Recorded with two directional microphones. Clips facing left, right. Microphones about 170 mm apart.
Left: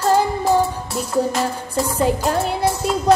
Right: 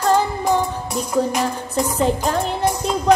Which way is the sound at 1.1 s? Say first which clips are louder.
Even; 15° right (ahead or behind).